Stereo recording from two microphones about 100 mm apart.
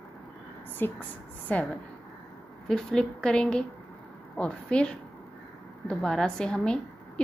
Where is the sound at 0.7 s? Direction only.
20° left (ahead or behind).